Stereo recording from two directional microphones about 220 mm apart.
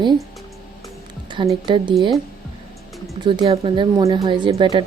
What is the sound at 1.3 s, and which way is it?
Speech, 20° right (ahead or behind).